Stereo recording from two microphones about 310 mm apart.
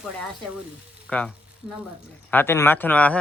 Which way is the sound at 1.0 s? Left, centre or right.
Centre.